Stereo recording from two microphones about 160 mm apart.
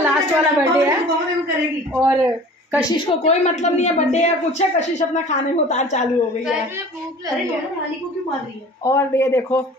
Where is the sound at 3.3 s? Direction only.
45° left (ahead or behind).